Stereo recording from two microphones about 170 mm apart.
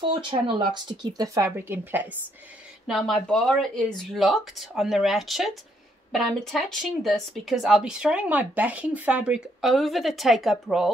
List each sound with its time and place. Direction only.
0.0 s speech: 30° right (ahead or behind); by 2.0 s 10° right (ahead or behind)
2.9 s speech: centre (ahead or behind)